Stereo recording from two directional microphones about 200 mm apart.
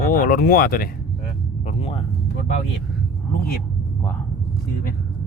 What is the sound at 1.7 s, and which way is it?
Rumble, 30° left (ahead or behind).